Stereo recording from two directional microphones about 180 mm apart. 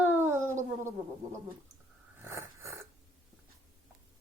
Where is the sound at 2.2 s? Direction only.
15° right (ahead or behind).